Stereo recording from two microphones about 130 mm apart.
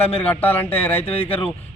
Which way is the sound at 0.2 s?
15° left (ahead or behind).